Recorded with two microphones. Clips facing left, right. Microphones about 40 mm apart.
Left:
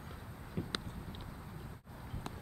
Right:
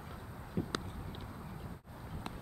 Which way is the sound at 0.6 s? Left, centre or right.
Centre.